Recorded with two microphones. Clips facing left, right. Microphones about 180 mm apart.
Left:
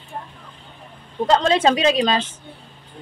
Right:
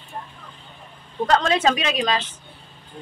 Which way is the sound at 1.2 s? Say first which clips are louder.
Left 3 dB; 25° left (ahead or behind).